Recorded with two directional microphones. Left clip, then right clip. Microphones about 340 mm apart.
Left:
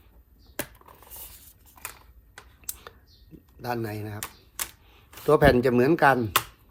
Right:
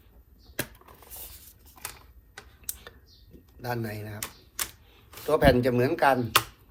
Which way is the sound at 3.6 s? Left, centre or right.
Centre.